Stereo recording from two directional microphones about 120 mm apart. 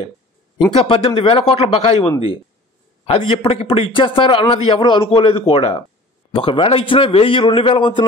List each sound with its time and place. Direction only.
0.7 s a man's voice: 50° left (ahead or behind)